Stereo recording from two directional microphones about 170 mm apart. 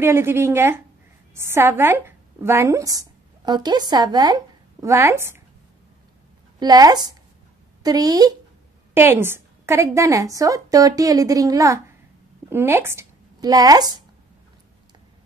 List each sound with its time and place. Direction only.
0.0 s a woman's voice: 15° right (ahead or behind)
6.6 s a woman's voice: 25° right (ahead or behind)